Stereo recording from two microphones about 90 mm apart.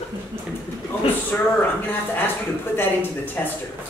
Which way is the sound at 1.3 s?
20° left (ahead or behind).